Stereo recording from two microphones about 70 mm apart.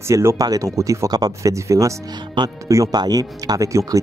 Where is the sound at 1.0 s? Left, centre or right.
Right.